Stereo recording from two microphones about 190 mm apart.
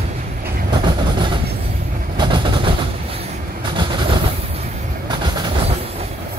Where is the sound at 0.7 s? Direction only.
25° right (ahead or behind).